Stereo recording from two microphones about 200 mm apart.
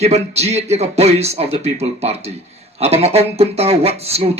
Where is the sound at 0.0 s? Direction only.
30° right (ahead or behind).